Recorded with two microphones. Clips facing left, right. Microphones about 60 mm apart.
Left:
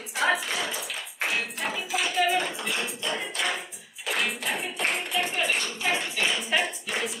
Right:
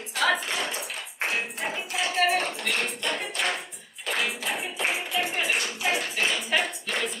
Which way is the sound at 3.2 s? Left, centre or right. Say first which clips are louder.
Even; centre.